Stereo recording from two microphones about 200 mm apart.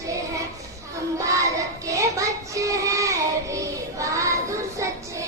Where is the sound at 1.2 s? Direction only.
15° right (ahead or behind).